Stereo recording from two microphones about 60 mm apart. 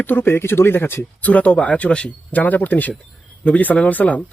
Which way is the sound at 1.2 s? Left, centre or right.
Left.